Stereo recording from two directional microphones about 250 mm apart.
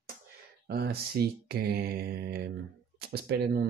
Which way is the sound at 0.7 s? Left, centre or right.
Right.